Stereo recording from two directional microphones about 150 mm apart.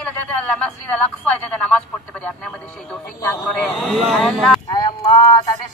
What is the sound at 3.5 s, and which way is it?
Speech, 5° left (ahead or behind).